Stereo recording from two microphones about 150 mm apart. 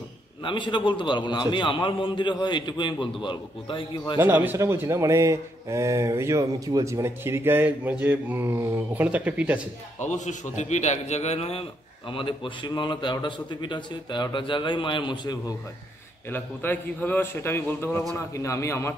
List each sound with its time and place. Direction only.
0.4 s a man's voice: 35° left (ahead or behind)
4.2 s speech: 10° right (ahead or behind)
10.0 s a man's voice: 55° left (ahead or behind); by 15.5 s 30° left (ahead or behind)
16.3 s a man's voice: 15° left (ahead or behind)